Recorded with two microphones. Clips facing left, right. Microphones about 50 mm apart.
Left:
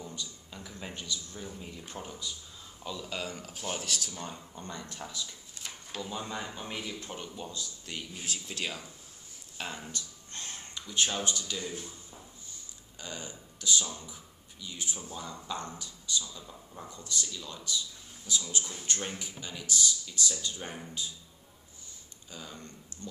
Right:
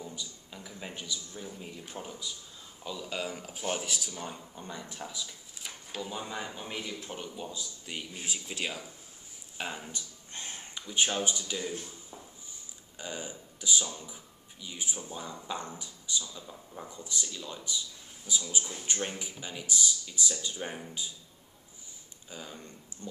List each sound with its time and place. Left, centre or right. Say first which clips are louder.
0.0 s a sound: even; centre
2.8 s speech: right 1 dB; centre
13.0 s speech: right 3 dB; centre
22.3 s speech: right 1 dB; centre